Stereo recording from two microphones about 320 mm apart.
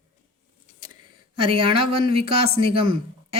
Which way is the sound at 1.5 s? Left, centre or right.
Centre.